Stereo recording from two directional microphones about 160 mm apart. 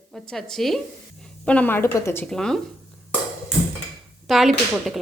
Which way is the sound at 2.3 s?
5° left (ahead or behind).